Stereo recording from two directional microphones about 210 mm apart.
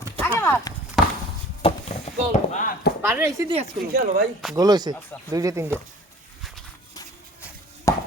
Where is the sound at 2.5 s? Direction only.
40° left (ahead or behind).